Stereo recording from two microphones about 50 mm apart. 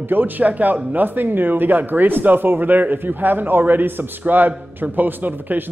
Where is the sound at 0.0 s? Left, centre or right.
Right.